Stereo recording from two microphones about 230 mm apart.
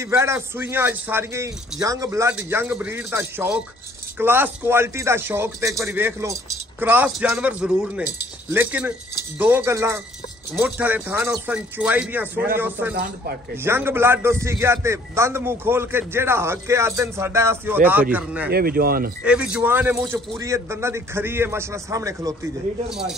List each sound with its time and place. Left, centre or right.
0.0 s a man's voice: centre
12.9 s speech: right
13.7 s a man's voice: centre
18.5 s speech: right
19.2 s a man's voice: centre
22.8 s speech: centre